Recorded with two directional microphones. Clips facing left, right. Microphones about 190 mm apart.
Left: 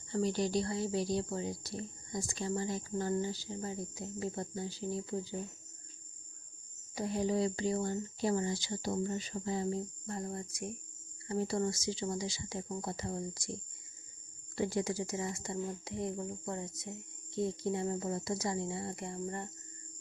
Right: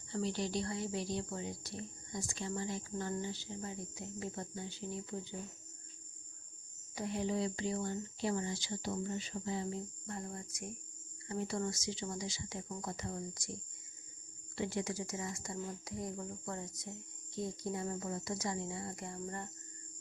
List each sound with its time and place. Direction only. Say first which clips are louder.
0.1 s speech: left 5 dB; 45° left (ahead or behind)
6.9 s speech: left 4 dB; 35° left (ahead or behind)
14.5 s speech: left 4 dB; 40° left (ahead or behind); by 19.5 s 25° left (ahead or behind)